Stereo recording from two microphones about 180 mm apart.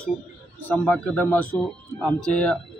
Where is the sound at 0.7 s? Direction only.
10° left (ahead or behind).